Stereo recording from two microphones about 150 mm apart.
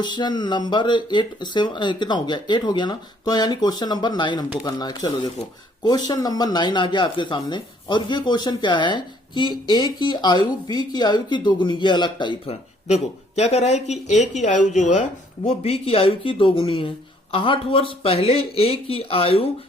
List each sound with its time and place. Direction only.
0.0 s speech: 30° left (ahead or behind)
12.9 s speech: 45° left (ahead or behind)